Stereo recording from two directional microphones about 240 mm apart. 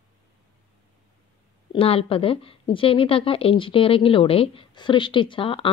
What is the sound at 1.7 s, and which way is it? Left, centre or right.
A woman's voice, left.